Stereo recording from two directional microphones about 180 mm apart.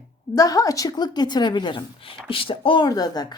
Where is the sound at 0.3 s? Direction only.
20° left (ahead or behind).